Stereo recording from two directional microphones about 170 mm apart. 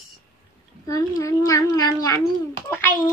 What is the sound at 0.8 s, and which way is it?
Baby laughter, 20° left (ahead or behind).